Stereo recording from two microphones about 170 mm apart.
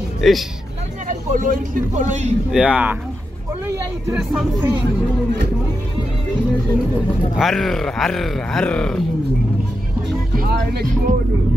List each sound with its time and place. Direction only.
0.2 s speech: centre (ahead or behind)
1.0 s speech: 50° right (ahead or behind)
2.5 s speech: 5° right (ahead or behind)
7.3 s speech: centre (ahead or behind)
10.4 s speech: 70° right (ahead or behind)